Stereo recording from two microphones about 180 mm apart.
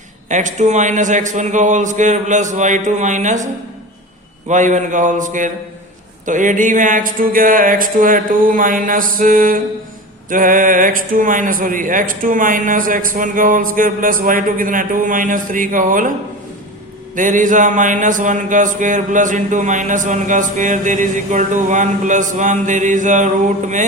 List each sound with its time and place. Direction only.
0.3 s mantra: 45° right (ahead or behind)
17.2 s mantra: 45° right (ahead or behind)